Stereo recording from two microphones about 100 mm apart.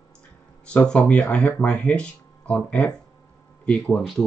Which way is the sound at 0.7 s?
10° left (ahead or behind).